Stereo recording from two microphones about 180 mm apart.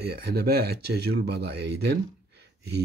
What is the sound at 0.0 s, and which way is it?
Speech, 60° right (ahead or behind).